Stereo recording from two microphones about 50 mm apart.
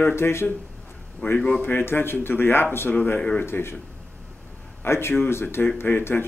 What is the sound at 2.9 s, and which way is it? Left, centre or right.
Speech, left.